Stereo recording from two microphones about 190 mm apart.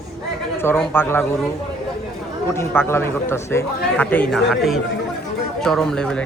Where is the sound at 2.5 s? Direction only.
10° left (ahead or behind).